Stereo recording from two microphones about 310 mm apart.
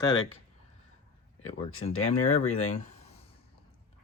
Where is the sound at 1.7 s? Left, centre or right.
Left.